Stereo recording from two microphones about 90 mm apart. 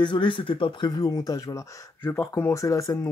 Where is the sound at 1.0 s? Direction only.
45° left (ahead or behind).